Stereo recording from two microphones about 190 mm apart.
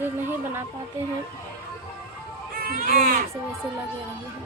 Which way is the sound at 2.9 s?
45° right (ahead or behind).